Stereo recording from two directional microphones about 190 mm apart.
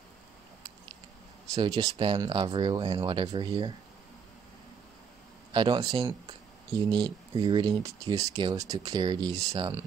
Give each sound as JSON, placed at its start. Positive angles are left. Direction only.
{"t": 1.5, "sound": "speech", "side_deg": -20}
{"t": 5.5, "sound": "speech", "side_deg": -25}